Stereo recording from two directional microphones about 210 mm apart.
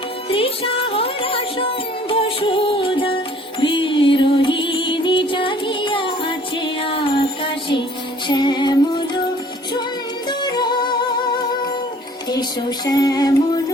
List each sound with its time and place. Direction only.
0.3 s music: 25° left (ahead or behind)
8.3 s music: 20° left (ahead or behind)
10.2 s music: 20° left (ahead or behind)